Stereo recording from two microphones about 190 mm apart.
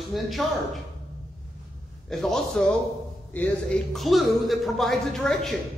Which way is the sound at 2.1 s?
Centre (ahead or behind).